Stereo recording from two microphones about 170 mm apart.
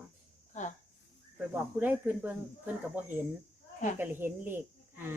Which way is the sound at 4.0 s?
10° right (ahead or behind).